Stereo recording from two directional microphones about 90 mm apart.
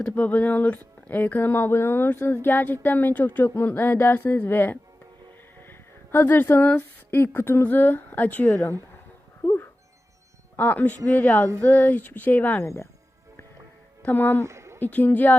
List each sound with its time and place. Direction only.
0.0 s speech: 15° left (ahead or behind)
8.4 s speech: 35° left (ahead or behind)
10.6 s speech: 20° left (ahead or behind)
14.0 s speech: 20° left (ahead or behind)
14.4 s a sound: 30° right (ahead or behind)
14.8 s speech: 20° left (ahead or behind)